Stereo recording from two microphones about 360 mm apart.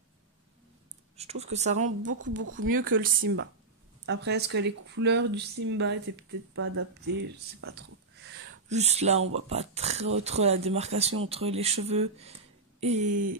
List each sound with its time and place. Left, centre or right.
1.1 s speech: centre
8.6 s speech: centre